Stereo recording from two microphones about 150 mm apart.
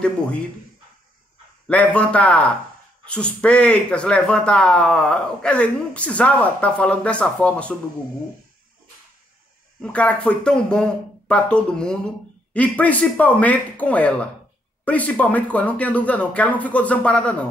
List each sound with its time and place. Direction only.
1.7 s speech: 10° left (ahead or behind)
9.8 s speech: 5° left (ahead or behind)